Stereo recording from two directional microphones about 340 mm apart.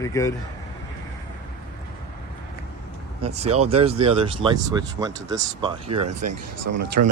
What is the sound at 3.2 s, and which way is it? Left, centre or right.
Speech, centre.